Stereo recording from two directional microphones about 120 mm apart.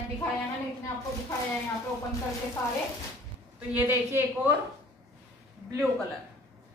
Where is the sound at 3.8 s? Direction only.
15° right (ahead or behind).